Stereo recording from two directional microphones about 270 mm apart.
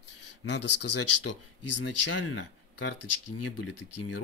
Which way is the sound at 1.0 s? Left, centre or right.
Left.